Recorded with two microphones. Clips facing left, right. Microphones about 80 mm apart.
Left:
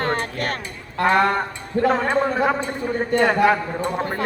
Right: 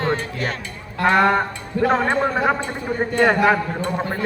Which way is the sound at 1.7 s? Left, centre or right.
Left.